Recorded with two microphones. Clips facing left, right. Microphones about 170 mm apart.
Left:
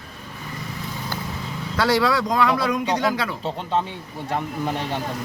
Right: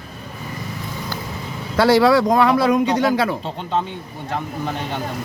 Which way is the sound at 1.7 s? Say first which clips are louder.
Right 6 dB; 30° right (ahead or behind).